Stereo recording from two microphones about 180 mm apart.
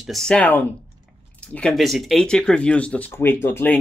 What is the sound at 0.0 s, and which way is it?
Speech, centre (ahead or behind).